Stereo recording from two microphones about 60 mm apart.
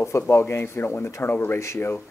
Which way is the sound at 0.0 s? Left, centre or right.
Left.